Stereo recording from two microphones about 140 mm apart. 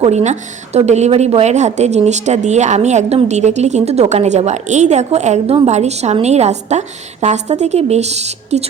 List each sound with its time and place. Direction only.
0.0 s speech: 50° right (ahead or behind)